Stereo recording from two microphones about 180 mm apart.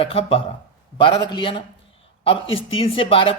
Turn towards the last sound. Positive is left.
turn(degrees=30)  # may be behind; listen again after turning